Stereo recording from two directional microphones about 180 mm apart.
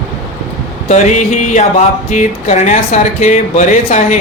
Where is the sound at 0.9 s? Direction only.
40° left (ahead or behind).